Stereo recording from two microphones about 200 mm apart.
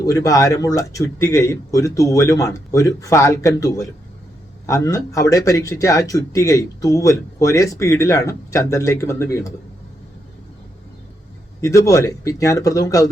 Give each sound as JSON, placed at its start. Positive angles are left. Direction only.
{"t": 0.0, "sound": "speech", "side_deg": 15}
{"t": 11.6, "sound": "speech", "side_deg": 15}